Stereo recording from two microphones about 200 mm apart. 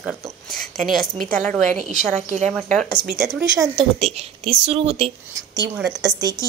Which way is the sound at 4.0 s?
30° right (ahead or behind).